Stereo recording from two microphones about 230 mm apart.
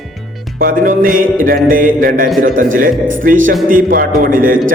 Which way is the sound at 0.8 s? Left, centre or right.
Right.